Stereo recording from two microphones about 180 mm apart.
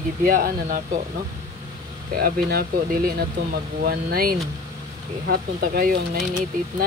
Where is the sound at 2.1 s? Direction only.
60° right (ahead or behind).